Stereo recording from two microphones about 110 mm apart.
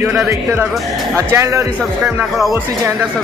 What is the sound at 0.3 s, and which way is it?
Speech, 20° right (ahead or behind).